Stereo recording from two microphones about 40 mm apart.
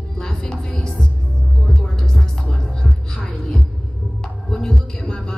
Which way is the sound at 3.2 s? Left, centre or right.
Left.